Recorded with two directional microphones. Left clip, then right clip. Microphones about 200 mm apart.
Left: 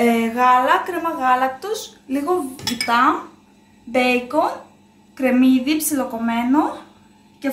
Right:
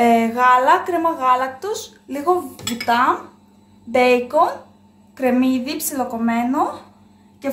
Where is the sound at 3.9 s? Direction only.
60° right (ahead or behind).